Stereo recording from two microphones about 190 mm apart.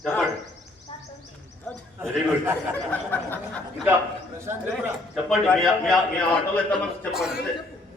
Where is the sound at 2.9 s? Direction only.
10° left (ahead or behind).